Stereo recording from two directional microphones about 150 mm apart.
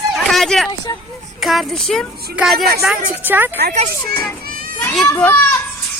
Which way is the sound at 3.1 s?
15° right (ahead or behind).